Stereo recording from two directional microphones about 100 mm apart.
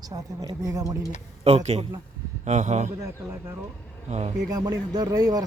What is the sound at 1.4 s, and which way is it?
Speech, 90° right.